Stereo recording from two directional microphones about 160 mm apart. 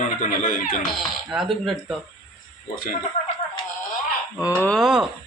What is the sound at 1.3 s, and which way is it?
Livestock, 5° right (ahead or behind).